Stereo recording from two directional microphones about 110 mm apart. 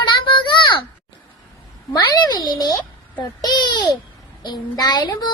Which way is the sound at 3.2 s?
35° left (ahead or behind).